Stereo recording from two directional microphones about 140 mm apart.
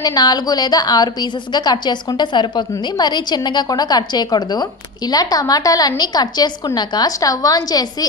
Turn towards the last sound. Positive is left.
turn(degrees=25)  # may be behind; listen again after turning